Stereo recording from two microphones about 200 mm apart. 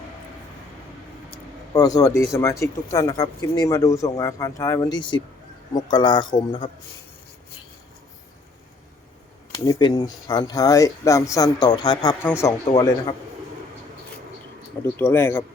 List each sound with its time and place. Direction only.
1.7 s speech: 20° left (ahead or behind)
9.5 s speech: 20° left (ahead or behind)
14.9 s speech: 10° left (ahead or behind)